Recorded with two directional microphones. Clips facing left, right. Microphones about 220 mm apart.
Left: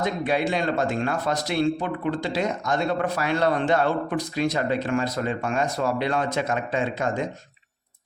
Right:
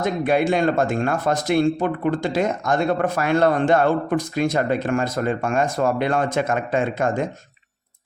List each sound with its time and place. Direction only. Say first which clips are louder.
0.0 s a man's voice: right 4 dB; 50° right (ahead or behind)